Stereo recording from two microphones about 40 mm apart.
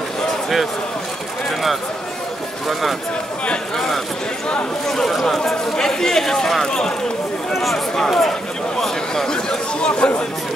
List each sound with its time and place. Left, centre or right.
3.7 s speech: centre
7.5 s speech: centre; by 10.1 s left